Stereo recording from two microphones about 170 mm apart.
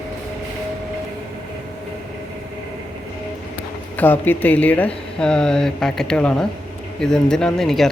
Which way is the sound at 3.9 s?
10° left (ahead or behind).